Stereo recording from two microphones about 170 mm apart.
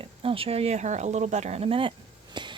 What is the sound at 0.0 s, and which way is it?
Speech, 30° right (ahead or behind).